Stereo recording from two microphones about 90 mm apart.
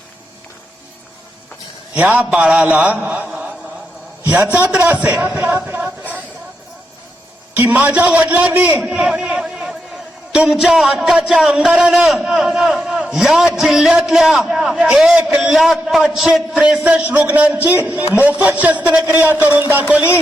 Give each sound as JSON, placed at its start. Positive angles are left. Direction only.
{"t": 2.0, "sound": "a man's voice", "side_deg": -20}
{"t": 3.2, "sound": "chant", "side_deg": -15}
{"t": 4.2, "sound": "a sound", "side_deg": -20}
{"t": 4.5, "sound": "a man's voice", "side_deg": -15}
{"t": 5.3, "sound": "a sound", "side_deg": -25}
{"t": 7.5, "sound": "a man's voice", "side_deg": -20}
{"t": 8.8, "sound": "a man's voice", "side_deg": -5}